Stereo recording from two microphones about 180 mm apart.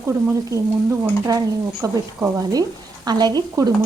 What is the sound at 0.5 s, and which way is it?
Speech, 15° right (ahead or behind).